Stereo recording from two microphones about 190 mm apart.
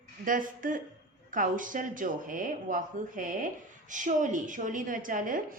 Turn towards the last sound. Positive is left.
turn(degrees=-45)  # may be behind; listen again after turning